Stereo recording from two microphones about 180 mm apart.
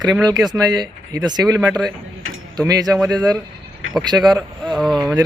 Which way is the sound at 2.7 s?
20° right (ahead or behind).